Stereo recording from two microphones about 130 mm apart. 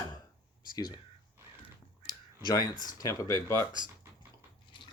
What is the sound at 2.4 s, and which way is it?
Speech, 30° left (ahead or behind).